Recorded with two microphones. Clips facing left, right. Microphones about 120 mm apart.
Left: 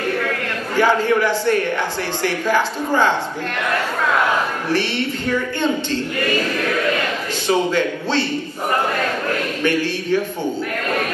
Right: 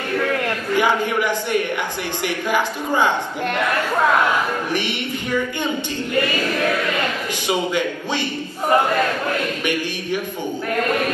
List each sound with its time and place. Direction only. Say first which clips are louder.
0.7 s speech: left 4 dB; 15° right (ahead or behind)
4.6 s speech: left 3 dB; 15° right (ahead or behind)
7.4 s speech: left 3 dB; 15° right (ahead or behind)
9.7 s speech: left 4 dB; 15° right (ahead or behind)